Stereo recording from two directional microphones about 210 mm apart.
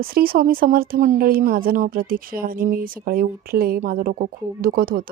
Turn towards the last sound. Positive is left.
turn(degrees=-45)  # may be behind; listen again after turning